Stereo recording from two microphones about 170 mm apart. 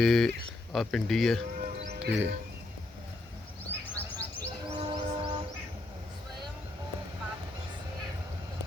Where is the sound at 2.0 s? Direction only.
90° right.